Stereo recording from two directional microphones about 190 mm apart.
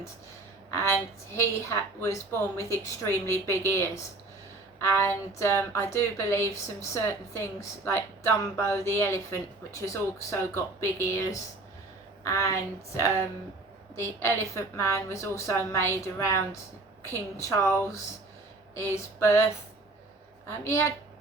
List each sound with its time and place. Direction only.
0.7 s a woman's voice: 15° left (ahead or behind)
4.9 s speech: 15° left (ahead or behind)
13.9 s speech: 15° left (ahead or behind)
20.7 s speech: 15° left (ahead or behind)